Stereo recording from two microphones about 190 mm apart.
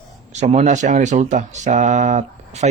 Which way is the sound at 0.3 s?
35° right (ahead or behind).